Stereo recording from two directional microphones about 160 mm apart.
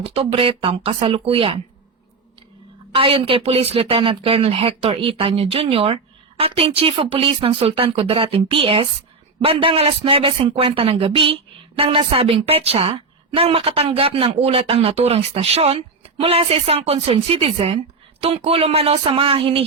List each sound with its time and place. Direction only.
0.0 s a woman's voice: 35° right (ahead or behind)
2.9 s a woman's voice: 35° right (ahead or behind)